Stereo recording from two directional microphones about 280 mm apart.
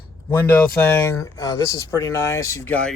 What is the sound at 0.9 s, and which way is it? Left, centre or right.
Speech, centre.